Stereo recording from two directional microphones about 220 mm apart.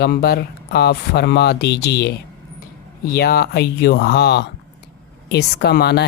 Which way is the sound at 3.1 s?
45° left (ahead or behind).